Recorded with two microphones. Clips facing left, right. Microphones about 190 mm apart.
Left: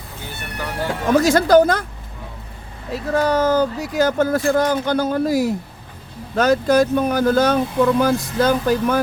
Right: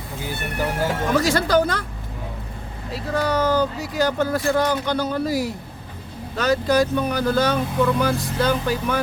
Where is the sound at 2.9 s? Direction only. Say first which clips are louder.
Left 4 dB; 45° left (ahead or behind).